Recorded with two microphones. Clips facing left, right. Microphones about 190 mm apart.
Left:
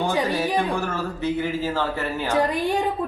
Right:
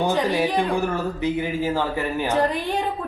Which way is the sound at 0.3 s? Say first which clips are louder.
Right 2 dB; 15° right (ahead or behind).